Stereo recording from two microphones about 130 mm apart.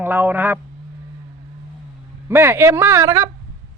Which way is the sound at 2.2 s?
20° right (ahead or behind).